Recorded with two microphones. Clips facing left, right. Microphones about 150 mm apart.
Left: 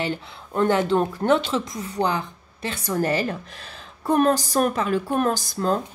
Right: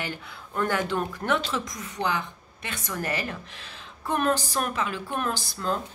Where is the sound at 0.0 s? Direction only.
25° left (ahead or behind).